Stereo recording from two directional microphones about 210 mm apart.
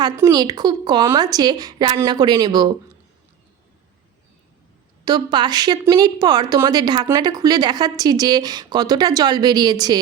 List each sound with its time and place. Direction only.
0.0 s a woman's voice: 20° right (ahead or behind)
5.0 s a woman's voice: 20° right (ahead or behind)